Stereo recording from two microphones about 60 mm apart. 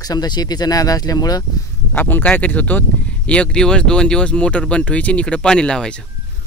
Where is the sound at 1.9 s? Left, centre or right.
Left; by 6.0 s centre.